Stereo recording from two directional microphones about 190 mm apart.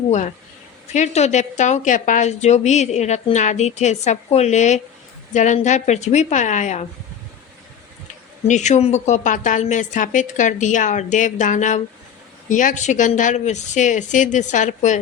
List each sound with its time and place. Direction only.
0.1 s a woman's voice: 40° left (ahead or behind)
8.4 s a woman's voice: 40° left (ahead or behind)